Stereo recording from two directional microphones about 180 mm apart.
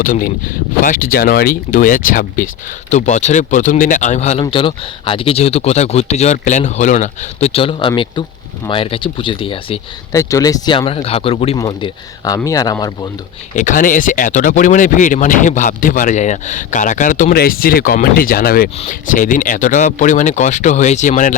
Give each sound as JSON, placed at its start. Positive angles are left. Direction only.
{"t": 0.8, "sound": "speech", "side_deg": 50}
{"t": 10.1, "sound": "speech", "side_deg": 15}
{"t": 11.5, "sound": "speech", "side_deg": 20}
{"t": 13.6, "sound": "speech", "side_deg": 45}